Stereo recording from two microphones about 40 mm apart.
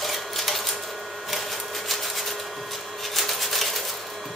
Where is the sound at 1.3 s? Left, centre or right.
Centre.